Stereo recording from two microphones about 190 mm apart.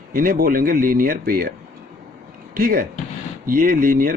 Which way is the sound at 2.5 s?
50° right (ahead or behind).